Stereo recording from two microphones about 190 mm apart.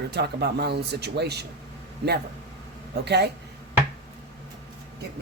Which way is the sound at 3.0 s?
60° right (ahead or behind).